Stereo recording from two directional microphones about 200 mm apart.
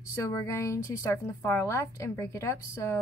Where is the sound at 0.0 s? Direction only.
15° left (ahead or behind).